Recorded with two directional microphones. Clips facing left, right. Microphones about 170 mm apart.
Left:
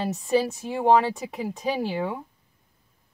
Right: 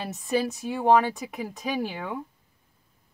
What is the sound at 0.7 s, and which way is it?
Speech, 25° left (ahead or behind).